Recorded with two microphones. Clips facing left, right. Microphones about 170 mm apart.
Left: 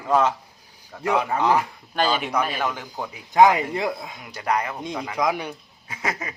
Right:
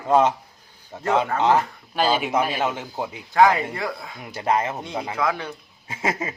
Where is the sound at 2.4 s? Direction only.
20° right (ahead or behind).